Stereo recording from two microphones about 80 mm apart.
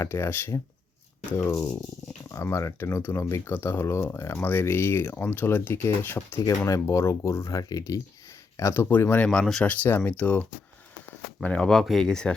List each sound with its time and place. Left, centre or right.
0.0 s speech: left
1.5 s speech: centre
2.3 s speech: left
8.5 s speech: left
9.2 s speech: centre
9.6 s speech: left
11.4 s speech: centre
11.7 s speech: centre